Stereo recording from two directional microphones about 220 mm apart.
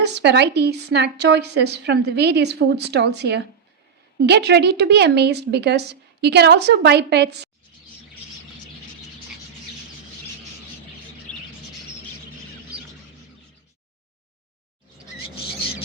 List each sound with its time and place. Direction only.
0.0 s a woman's voice: 50° right (ahead or behind)